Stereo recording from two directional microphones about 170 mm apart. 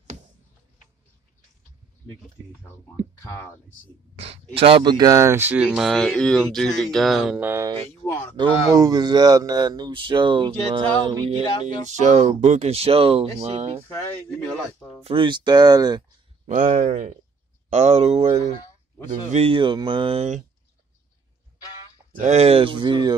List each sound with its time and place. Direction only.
3.2 s speech: 15° left (ahead or behind)
4.2 s speech: 35° right (ahead or behind); by 7.3 s centre (ahead or behind)
7.3 s speech: 15° right (ahead or behind); by 11.4 s 30° right (ahead or behind)
11.6 s speech: 45° right (ahead or behind)
15.0 s speech: 30° right (ahead or behind)
16.4 s speech: 50° right (ahead or behind)
22.2 s speech: 40° right (ahead or behind)